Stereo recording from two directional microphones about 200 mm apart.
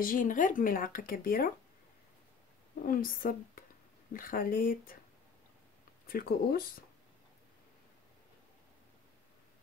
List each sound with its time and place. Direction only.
0.0 s speech: 45° left (ahead or behind)
2.8 s speech: 45° left (ahead or behind)
6.0 s speech: 45° left (ahead or behind)